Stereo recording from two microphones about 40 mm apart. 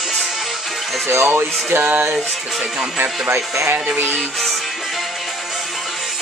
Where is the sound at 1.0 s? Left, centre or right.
Right.